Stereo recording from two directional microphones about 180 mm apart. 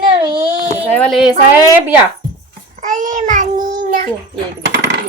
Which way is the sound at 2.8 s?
45° right (ahead or behind).